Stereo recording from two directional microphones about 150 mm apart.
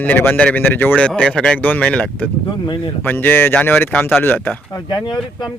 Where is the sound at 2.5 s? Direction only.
35° left (ahead or behind).